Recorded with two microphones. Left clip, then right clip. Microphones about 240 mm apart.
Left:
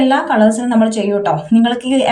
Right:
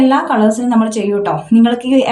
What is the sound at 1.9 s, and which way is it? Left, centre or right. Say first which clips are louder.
Speech: right 3 dB; right.